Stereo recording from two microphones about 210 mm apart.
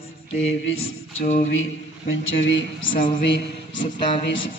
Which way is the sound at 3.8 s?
20° left (ahead or behind).